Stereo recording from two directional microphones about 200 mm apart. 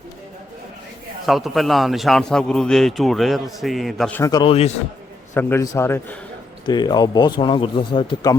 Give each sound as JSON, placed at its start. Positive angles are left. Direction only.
{"t": 1.3, "sound": "a man's voice", "side_deg": 0}
{"t": 4.2, "sound": "speech", "side_deg": 20}
{"t": 5.3, "sound": "a man's voice", "side_deg": 10}